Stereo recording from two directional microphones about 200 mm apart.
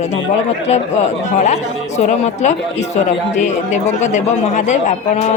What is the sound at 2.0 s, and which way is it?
A man's voice, 35° left (ahead or behind).